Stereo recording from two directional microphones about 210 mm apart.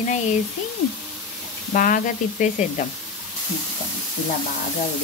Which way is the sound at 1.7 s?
40° left (ahead or behind).